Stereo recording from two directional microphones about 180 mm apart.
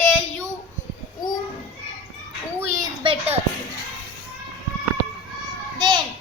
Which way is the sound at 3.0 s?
30° right (ahead or behind).